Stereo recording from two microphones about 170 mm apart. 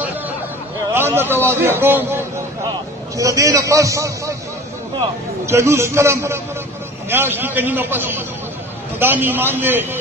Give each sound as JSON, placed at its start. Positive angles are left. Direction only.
{"t": 0.9, "sound": "a man's voice", "side_deg": -15}
{"t": 5.5, "sound": "a man's voice", "side_deg": -15}